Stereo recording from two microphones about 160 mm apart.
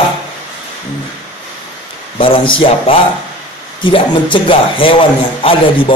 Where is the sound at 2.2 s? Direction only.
35° left (ahead or behind).